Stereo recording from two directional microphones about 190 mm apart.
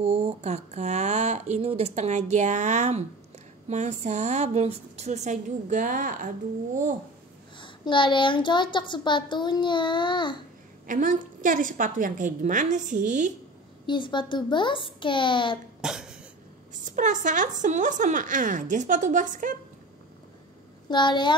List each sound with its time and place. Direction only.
0.0 s a woman's voice: 30° right (ahead or behind)
7.5 s a child's voice: 25° left (ahead or behind)
10.9 s a woman's voice: 45° right (ahead or behind)
13.8 s a child's voice: 25° left (ahead or behind)
15.8 s cough: 5° right (ahead or behind)
16.8 s a woman's voice: 40° right (ahead or behind)
20.9 s a child's voice: 25° left (ahead or behind)